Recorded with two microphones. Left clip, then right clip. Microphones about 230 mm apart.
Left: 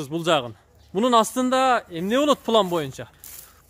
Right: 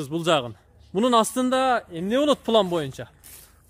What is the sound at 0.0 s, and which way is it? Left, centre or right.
A man's voice, centre.